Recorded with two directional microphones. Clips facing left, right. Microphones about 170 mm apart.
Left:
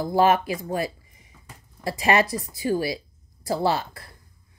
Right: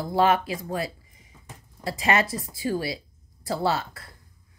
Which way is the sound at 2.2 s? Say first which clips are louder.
Left 2 dB; 25° right (ahead or behind).